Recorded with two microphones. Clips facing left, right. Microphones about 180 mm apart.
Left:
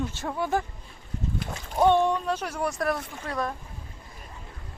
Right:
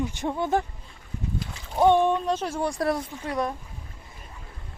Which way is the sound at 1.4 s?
50° left (ahead or behind).